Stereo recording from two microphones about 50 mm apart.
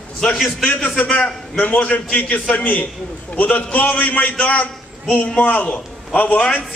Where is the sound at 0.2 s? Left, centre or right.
Centre.